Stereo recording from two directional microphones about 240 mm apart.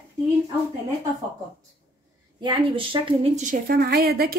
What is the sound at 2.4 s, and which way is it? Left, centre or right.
A woman's voice, right.